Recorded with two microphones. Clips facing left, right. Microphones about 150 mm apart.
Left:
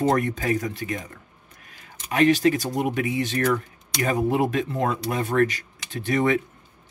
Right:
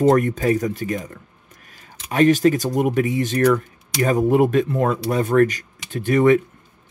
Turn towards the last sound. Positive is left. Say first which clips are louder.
# right 7 dB
turn(degrees=-45)  # may be behind; listen again after turning